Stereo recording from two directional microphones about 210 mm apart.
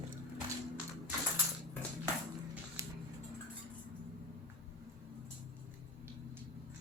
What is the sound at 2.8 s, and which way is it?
Music, 15° right (ahead or behind).